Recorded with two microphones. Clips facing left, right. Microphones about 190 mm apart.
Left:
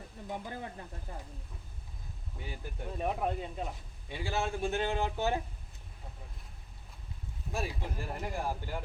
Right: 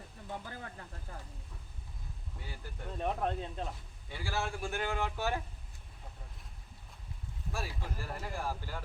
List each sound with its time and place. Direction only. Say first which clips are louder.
0.3 s a man's voice: left 4 dB; 20° left (ahead or behind)
2.4 s a man's voice: left 5 dB; 20° left (ahead or behind)
2.9 s a man's voice: left 1 dB; 10° left (ahead or behind)
7.5 s a man's voice: left 4 dB; 20° left (ahead or behind)